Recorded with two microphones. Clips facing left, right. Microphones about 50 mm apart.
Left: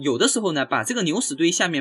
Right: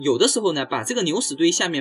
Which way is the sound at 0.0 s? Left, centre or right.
Centre.